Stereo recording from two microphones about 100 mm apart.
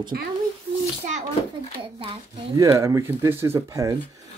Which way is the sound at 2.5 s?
30° right (ahead or behind).